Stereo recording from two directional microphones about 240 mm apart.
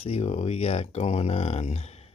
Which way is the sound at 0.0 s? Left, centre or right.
Left.